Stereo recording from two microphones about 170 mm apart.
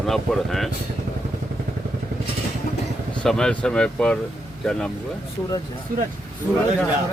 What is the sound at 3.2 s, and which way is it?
Speech, 5° left (ahead or behind).